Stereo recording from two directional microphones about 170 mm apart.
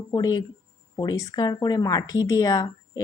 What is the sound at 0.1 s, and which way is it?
Speech, 25° left (ahead or behind).